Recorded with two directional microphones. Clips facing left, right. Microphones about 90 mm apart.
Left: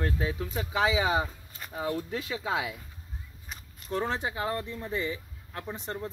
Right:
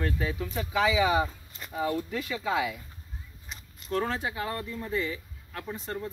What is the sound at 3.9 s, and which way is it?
Speech, 25° left (ahead or behind).